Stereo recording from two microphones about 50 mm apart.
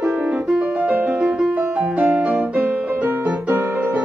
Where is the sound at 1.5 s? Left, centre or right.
Right.